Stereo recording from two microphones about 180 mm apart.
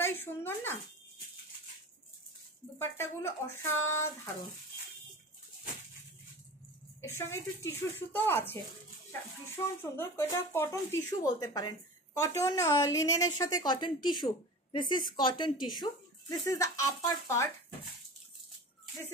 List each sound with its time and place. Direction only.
0.0 s a sound: 10° left (ahead or behind)
2.8 s speech: 15° left (ahead or behind)
7.0 s speech: 15° left (ahead or behind)
9.8 s speech: 15° left (ahead or behind)